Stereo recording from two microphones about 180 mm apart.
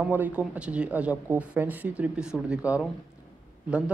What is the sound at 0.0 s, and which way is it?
Speech, 10° right (ahead or behind).